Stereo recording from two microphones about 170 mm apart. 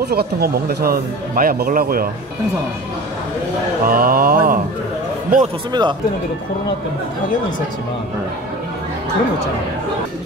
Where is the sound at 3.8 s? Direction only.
60° right (ahead or behind).